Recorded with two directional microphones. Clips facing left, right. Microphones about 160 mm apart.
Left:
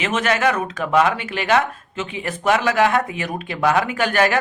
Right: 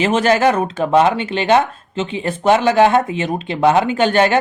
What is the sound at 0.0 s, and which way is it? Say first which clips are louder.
Speech: right 6 dB; 30° right (ahead or behind).